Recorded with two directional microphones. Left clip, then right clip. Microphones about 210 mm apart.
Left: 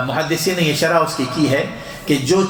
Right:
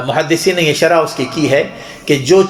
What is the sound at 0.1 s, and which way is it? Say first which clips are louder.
Speech: right 11 dB; 40° right (ahead or behind).